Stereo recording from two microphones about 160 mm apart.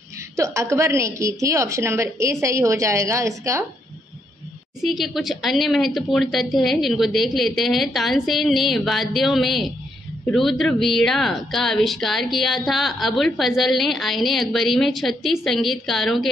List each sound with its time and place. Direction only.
0.4 s a woman's voice: 20° right (ahead or behind)
4.8 s a woman's voice: centre (ahead or behind)